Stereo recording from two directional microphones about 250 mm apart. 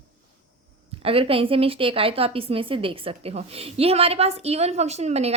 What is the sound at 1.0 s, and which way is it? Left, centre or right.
A woman's voice, right.